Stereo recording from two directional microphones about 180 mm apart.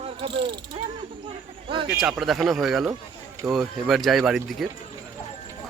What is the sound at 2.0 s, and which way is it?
Speech, centre (ahead or behind).